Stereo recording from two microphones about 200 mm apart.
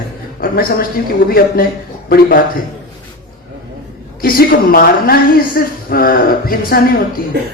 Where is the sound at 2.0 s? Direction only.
50° left (ahead or behind).